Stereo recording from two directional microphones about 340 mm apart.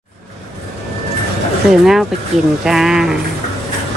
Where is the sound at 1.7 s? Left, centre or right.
Centre.